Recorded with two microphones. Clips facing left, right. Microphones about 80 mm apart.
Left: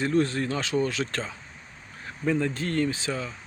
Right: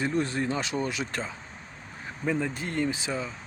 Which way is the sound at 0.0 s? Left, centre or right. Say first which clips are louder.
Left 3 dB; centre.